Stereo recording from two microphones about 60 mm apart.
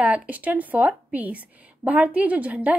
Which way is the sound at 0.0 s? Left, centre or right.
Right.